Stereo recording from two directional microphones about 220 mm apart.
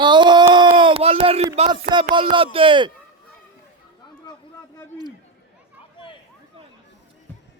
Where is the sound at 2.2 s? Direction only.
25° right (ahead or behind).